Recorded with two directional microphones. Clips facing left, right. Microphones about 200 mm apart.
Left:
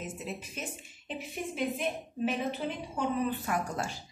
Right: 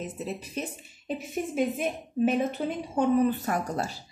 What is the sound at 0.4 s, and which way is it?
A woman's voice, 40° right (ahead or behind).